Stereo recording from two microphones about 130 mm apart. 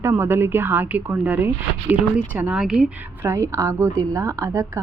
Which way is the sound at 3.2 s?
20° right (ahead or behind).